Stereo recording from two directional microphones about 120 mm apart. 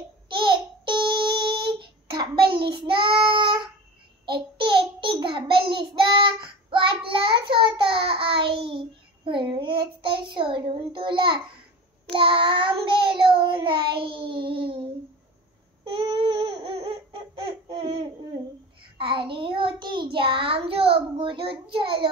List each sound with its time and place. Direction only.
0.4 s child singing: 45° right (ahead or behind)
15.9 s a sound: 45° right (ahead or behind)
18.9 s child singing: 45° right (ahead or behind)